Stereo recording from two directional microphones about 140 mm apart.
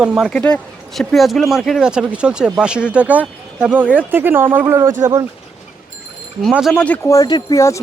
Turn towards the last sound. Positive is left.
turn(degrees=20)  # may be behind; listen again after turning